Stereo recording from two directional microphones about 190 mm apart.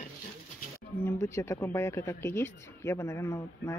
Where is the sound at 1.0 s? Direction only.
10° left (ahead or behind).